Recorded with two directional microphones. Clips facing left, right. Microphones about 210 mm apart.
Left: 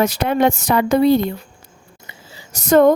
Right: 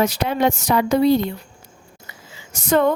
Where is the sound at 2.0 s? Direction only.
35° left (ahead or behind).